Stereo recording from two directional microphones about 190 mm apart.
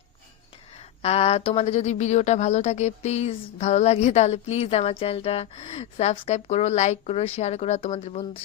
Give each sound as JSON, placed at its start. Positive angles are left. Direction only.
{"t": 1.0, "sound": "a woman's voice", "side_deg": 30}